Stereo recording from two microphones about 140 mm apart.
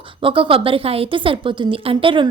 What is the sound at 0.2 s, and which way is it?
A woman's voice, 40° right (ahead or behind).